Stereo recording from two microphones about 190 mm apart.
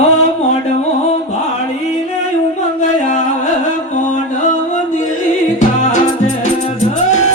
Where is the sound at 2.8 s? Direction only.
40° left (ahead or behind).